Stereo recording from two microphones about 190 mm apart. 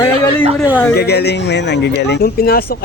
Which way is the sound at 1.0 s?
60° left (ahead or behind).